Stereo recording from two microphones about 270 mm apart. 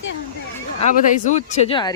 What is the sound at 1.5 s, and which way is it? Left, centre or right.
Speech, centre.